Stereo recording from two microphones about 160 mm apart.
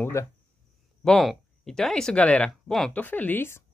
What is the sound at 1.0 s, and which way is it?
Speech, centre (ahead or behind).